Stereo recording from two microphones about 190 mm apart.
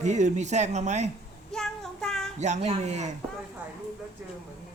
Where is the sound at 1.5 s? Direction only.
5° left (ahead or behind).